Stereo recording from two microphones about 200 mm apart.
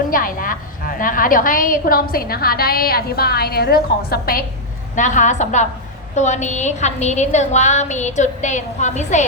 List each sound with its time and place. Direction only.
0.1 s a woman's voice: 45° left (ahead or behind)
4.9 s a woman's voice: 40° left (ahead or behind)